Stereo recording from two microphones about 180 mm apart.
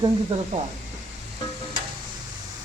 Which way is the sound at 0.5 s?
45° right (ahead or behind).